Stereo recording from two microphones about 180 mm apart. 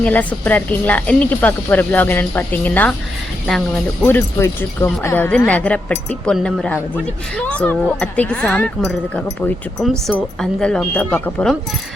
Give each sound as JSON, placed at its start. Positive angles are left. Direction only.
{"t": 0.0, "sound": "speech", "side_deg": 10}
{"t": 4.0, "sound": "a woman's voice", "side_deg": 15}